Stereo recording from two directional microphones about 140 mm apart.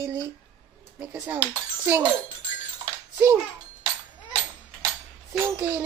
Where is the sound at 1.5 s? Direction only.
15° right (ahead or behind).